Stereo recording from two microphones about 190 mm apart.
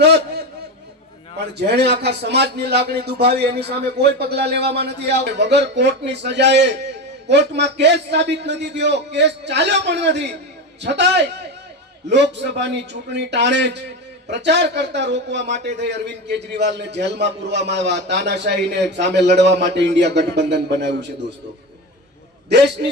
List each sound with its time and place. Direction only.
0.0 s a sound: 60° right (ahead or behind)
1.5 s a man's voice: 60° right (ahead or behind)
22.8 s speech: 55° right (ahead or behind)